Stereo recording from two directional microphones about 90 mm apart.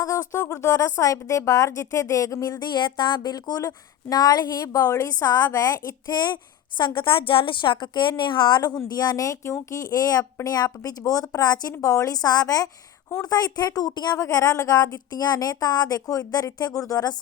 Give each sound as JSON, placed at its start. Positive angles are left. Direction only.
{"t": 0.0, "sound": "a woman's voice", "side_deg": 35}
{"t": 8.9, "sound": "a woman's voice", "side_deg": 45}